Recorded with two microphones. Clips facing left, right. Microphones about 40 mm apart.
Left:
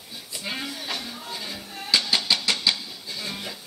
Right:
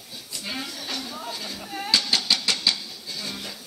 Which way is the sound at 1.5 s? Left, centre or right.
Centre.